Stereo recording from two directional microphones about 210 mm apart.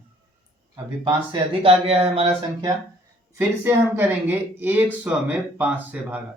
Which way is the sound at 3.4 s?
10° right (ahead or behind).